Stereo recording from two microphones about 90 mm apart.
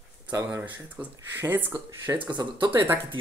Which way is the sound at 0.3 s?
20° right (ahead or behind).